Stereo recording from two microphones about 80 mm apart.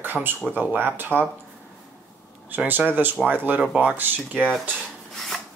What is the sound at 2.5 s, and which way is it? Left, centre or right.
Speech, right.